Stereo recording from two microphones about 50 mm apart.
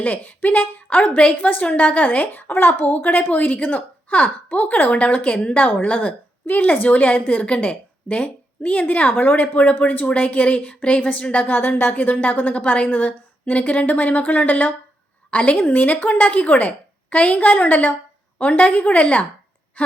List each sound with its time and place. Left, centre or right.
0.0 s a woman's voice: left
4.9 s a woman's voice: left
10.1 s a woman's voice: left